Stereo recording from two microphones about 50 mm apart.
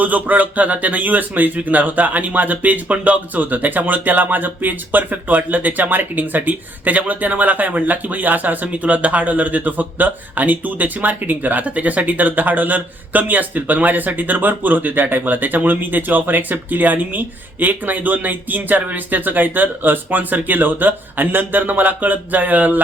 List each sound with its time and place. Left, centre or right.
0.0 s speech: right